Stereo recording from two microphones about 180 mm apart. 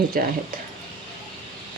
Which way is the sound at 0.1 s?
55° right (ahead or behind).